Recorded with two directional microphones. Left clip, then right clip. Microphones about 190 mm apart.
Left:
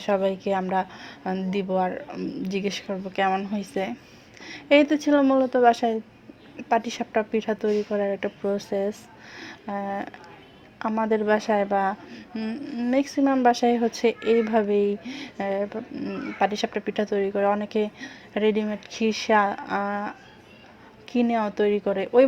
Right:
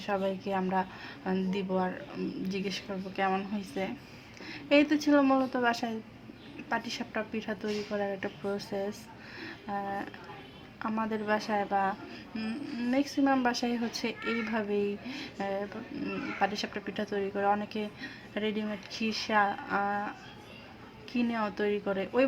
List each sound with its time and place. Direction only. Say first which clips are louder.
0.0 s a woman's voice: left 8 dB; 35° left (ahead or behind)